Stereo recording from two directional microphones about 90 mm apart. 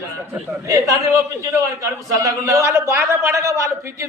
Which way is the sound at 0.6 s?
35° right (ahead or behind).